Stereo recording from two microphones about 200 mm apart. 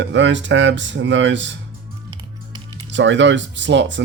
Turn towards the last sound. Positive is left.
turn(degrees=-65)  # may be behind; listen again after turning